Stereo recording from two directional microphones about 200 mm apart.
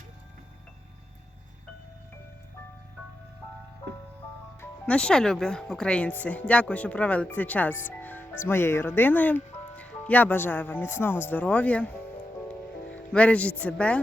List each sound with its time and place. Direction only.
4.6 s speech: 5° left (ahead or behind)
13.1 s speech: 5° left (ahead or behind)